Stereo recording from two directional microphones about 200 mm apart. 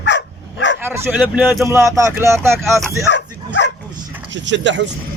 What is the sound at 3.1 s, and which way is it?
Bow-wow, 65° left (ahead or behind).